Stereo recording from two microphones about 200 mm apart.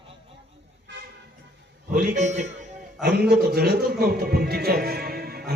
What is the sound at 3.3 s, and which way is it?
Speech, 50° right (ahead or behind).